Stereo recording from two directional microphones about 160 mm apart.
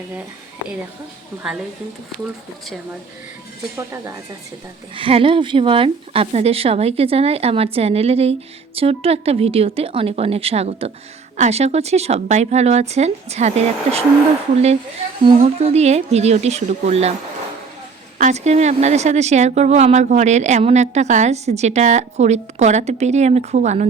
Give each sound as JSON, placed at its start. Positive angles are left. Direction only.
{"t": 4.9, "sound": "a woman's voice", "side_deg": -35}
{"t": 18.2, "sound": "speech", "side_deg": -45}